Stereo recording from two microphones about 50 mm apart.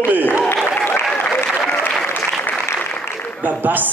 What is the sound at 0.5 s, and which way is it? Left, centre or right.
Speech, left.